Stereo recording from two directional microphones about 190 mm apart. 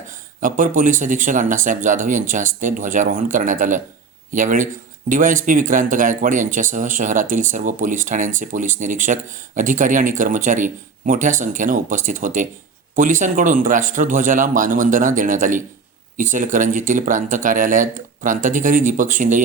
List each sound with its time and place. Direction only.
0.3 s speech: 45° right (ahead or behind)